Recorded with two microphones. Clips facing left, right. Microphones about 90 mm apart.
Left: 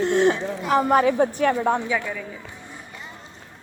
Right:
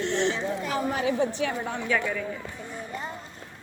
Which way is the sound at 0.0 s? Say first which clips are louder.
Left 7 dB; 45° left (ahead or behind).